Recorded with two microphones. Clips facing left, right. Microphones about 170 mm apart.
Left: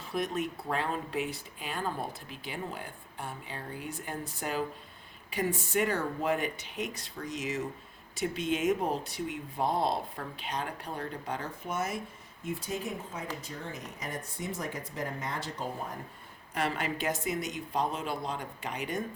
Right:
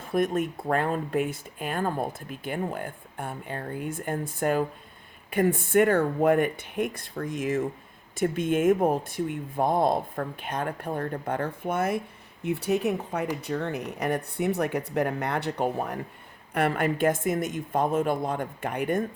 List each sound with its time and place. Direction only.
0.0 s speech: 50° right (ahead or behind); by 16.0 s 65° right (ahead or behind)
16.6 s speech: 55° right (ahead or behind)